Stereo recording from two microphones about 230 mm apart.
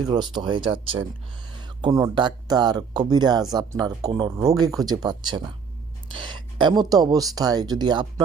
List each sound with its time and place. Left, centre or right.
0.0 s speech: centre